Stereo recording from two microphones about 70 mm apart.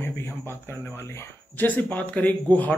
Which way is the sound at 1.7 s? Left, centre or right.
Left.